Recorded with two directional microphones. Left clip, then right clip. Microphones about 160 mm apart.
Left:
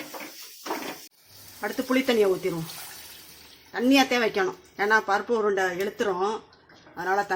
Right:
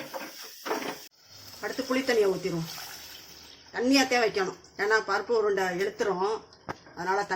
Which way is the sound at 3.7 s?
50° left (ahead or behind).